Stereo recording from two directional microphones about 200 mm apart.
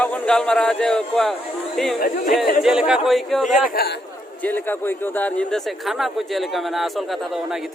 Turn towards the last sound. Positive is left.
turn(degrees=0)  # may be behind; listen again after turning